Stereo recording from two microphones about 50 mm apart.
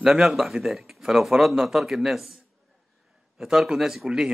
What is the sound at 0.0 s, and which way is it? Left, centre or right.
Speech, centre.